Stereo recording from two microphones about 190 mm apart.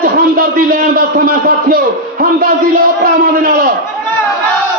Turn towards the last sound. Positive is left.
turn(degrees=-50)  # may be behind; listen again after turning